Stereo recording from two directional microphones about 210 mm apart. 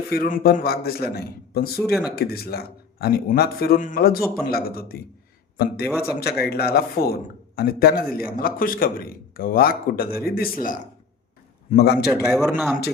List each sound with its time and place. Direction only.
0.1 s a man's voice: 45° left (ahead or behind)
1.8 s speech: centre (ahead or behind)
2.1 s a man's voice: 45° left (ahead or behind)
12.3 s speech: centre (ahead or behind)